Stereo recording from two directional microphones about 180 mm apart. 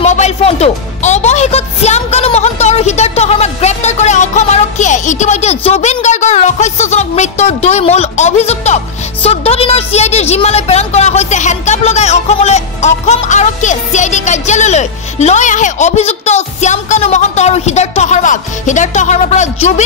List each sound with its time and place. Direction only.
0.0 s speech: 40° left (ahead or behind)